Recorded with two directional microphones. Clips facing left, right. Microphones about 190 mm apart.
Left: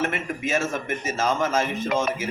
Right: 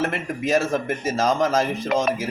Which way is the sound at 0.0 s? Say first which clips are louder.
Right 2 dB; 35° right (ahead or behind).